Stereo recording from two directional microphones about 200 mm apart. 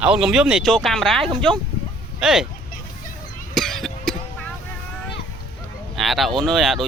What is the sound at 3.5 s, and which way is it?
Cough, centre (ahead or behind).